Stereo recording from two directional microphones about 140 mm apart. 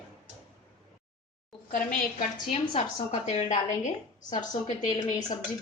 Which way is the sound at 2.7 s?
50° left (ahead or behind).